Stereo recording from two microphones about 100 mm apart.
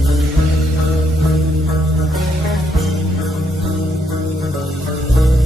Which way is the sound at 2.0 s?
Centre (ahead or behind).